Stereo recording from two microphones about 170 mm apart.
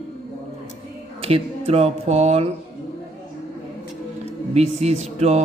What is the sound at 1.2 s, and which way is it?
Speech, 35° right (ahead or behind).